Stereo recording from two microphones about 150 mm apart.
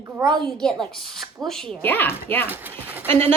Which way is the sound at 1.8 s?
15° left (ahead or behind).